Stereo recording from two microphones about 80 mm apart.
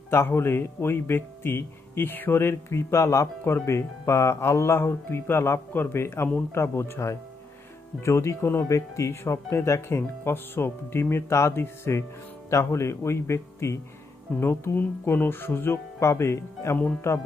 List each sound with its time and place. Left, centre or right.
0.1 s speech: left